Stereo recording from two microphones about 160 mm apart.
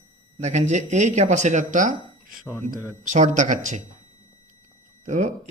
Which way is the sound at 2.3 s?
Centre (ahead or behind).